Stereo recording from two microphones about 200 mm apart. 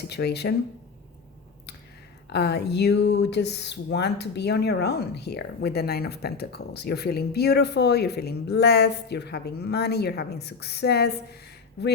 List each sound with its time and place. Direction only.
0.0 s speech: 55° left (ahead or behind)
2.3 s speech: 55° left (ahead or behind)